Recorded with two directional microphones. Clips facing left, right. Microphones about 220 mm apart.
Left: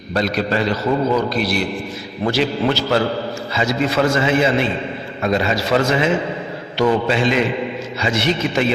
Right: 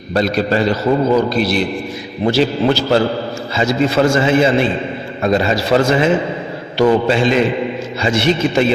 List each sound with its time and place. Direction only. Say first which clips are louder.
0.1 s a man's voice: right 4 dB; 30° right (ahead or behind)